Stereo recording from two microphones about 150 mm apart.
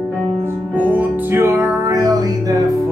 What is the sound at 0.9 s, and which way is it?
Music, 15° right (ahead or behind).